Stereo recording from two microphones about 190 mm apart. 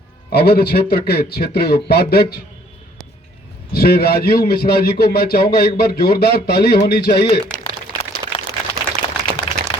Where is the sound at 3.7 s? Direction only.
55° left (ahead or behind).